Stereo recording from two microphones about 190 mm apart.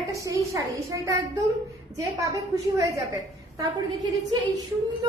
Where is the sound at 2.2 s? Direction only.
15° right (ahead or behind).